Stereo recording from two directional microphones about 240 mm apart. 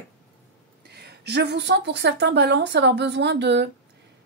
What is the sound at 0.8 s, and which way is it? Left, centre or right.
A woman's voice, right.